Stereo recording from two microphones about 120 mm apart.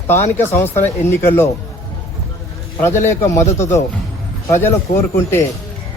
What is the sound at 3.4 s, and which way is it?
Speech, 70° left (ahead or behind).